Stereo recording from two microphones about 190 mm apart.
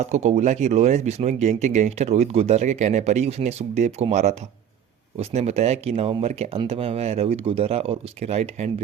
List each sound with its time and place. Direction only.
0.0 s speech: 35° right (ahead or behind)